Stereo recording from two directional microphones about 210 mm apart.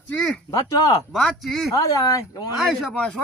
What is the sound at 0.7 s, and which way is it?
Speech, 15° left (ahead or behind).